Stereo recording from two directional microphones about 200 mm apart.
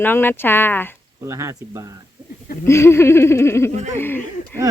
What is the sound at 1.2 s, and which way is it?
Speech, 15° right (ahead or behind).